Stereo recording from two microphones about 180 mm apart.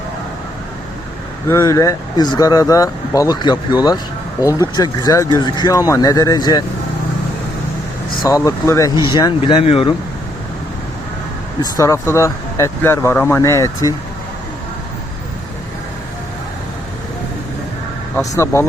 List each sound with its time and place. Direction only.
1.5 s speech: 15° left (ahead or behind)
8.2 s speech: 20° left (ahead or behind)
11.6 s speech: 15° left (ahead or behind)